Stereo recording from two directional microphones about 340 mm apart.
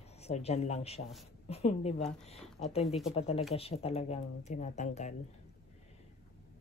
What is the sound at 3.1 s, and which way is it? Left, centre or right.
Speech, centre.